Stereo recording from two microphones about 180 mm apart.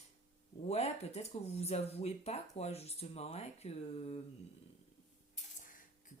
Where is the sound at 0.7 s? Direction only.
35° left (ahead or behind).